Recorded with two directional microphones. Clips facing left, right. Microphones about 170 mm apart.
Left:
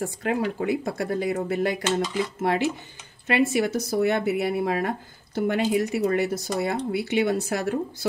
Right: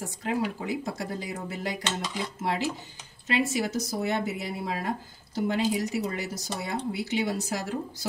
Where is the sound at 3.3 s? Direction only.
60° left (ahead or behind).